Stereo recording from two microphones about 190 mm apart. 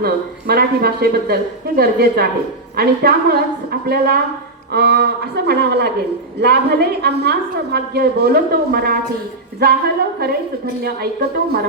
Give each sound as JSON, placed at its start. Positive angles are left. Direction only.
{"t": 0.0, "sound": "a woman's voice", "side_deg": -55}